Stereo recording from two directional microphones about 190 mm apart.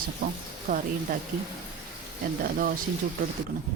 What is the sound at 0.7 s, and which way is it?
Speech, 40° right (ahead or behind).